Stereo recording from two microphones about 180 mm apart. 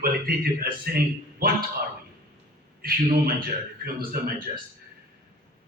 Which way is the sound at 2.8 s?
55° right (ahead or behind).